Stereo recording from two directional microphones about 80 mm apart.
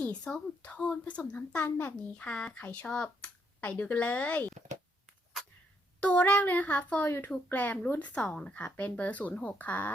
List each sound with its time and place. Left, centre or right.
0.0 s a child's voice: centre
6.0 s a child's voice: centre